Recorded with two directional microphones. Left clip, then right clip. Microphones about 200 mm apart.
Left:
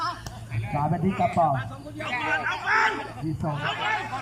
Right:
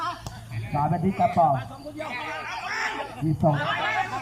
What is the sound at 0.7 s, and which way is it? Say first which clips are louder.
Speech: right 2 dB; centre (ahead or behind).